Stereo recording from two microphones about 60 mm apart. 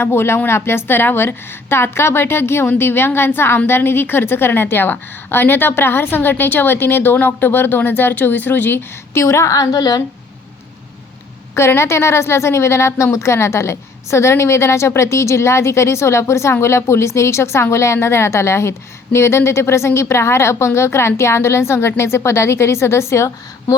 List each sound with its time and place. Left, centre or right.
0.0 s a woman's voice: left
9.1 s a woman's voice: left
11.5 s a woman's voice: left